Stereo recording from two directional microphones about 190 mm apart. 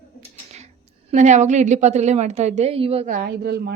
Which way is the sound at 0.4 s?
35° right (ahead or behind).